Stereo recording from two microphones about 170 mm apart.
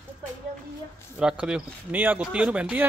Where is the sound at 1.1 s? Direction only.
5° right (ahead or behind).